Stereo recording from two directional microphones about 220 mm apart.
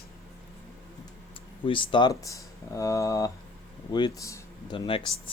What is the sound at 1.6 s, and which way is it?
Speech, 20° left (ahead or behind).